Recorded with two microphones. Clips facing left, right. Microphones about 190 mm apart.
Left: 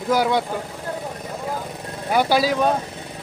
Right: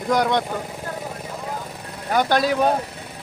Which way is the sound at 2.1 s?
10° left (ahead or behind).